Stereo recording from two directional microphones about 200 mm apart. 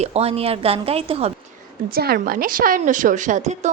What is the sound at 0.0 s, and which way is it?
A woman's voice, 30° right (ahead or behind).